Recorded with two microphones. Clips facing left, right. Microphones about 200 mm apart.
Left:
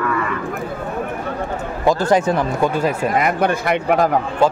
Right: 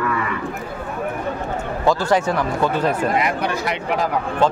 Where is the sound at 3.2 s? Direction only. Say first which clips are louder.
Left 4 dB; 50° left (ahead or behind).